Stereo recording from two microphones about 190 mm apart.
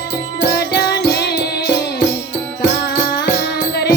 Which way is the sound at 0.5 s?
55° left (ahead or behind).